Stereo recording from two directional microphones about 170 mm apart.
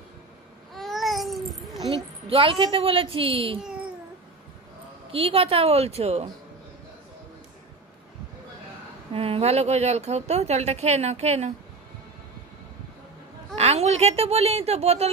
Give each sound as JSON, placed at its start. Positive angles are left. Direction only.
{"t": 0.7, "sound": "babbling", "side_deg": 0}
{"t": 2.2, "sound": "a woman's voice", "side_deg": -35}
{"t": 5.1, "sound": "a woman's voice", "side_deg": -35}
{"t": 9.1, "sound": "a woman's voice", "side_deg": -35}
{"t": 13.6, "sound": "a woman's voice", "side_deg": -40}